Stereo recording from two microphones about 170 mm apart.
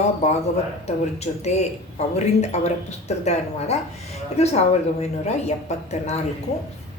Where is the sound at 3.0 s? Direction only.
40° left (ahead or behind).